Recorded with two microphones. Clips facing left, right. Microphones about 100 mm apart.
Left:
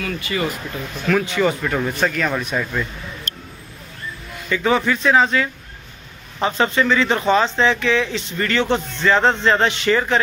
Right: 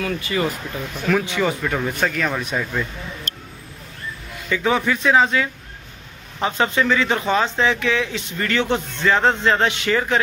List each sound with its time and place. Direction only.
0.0 s speech: 15° right (ahead or behind)
1.4 s a man's voice: centre (ahead or behind)
4.5 s a man's voice: 5° right (ahead or behind)